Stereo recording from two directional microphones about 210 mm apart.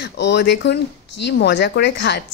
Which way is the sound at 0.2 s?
55° left (ahead or behind).